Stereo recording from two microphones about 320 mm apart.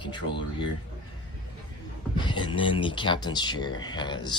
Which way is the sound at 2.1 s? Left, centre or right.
Centre.